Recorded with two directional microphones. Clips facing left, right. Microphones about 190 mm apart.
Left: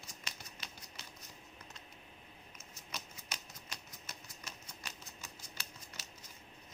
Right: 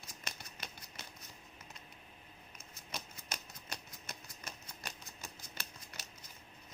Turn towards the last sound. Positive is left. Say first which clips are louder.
# right 1 dB
turn(degrees=-55)  # may be behind; listen again after turning